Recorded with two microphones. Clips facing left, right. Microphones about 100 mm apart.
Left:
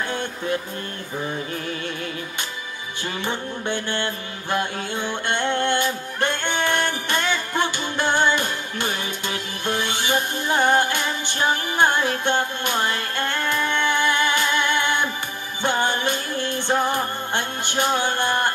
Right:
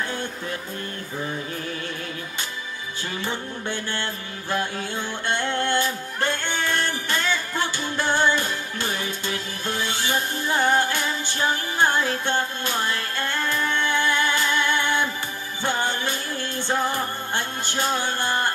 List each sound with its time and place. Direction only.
3.2 s mantra: 20° left (ahead or behind)
6.9 s music: 20° left (ahead or behind)
18.2 s music: 60° left (ahead or behind)